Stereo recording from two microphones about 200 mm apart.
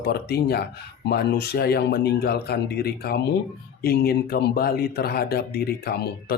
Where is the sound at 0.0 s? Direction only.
55° left (ahead or behind).